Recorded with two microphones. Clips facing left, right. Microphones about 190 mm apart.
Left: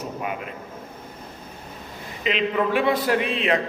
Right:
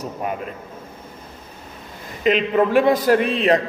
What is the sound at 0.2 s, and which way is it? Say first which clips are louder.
Speech: right 6 dB; 40° right (ahead or behind).